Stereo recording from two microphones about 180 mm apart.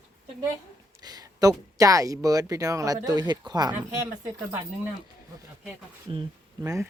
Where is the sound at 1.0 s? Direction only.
20° right (ahead or behind).